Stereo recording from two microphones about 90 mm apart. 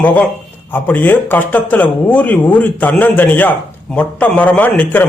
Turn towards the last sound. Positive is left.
turn(degrees=20)  # may be behind; listen again after turning